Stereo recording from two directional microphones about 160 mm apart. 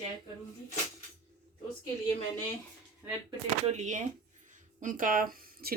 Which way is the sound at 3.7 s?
50° right (ahead or behind).